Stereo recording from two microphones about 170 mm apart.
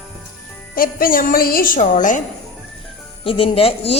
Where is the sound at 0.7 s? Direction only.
55° left (ahead or behind).